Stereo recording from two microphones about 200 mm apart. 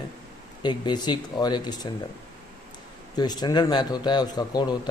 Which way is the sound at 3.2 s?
20° left (ahead or behind).